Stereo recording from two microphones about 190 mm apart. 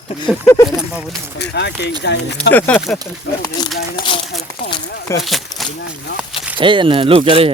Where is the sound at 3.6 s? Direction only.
20° left (ahead or behind).